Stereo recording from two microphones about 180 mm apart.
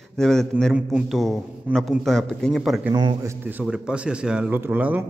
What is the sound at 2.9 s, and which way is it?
Speech, 25° right (ahead or behind).